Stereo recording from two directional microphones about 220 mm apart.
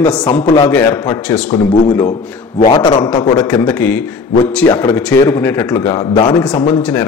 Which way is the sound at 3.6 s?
5° left (ahead or behind).